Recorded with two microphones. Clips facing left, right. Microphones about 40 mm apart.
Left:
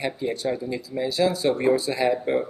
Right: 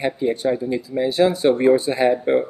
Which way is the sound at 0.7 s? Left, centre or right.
Right.